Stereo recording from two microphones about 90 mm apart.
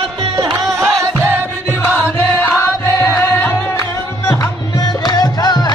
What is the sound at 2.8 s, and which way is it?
Music, 30° left (ahead or behind).